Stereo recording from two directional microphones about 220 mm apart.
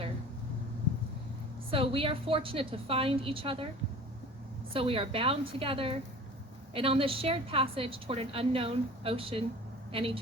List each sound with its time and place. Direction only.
1.7 s a woman's voice: 25° right (ahead or behind)
4.7 s a woman's voice: 25° right (ahead or behind)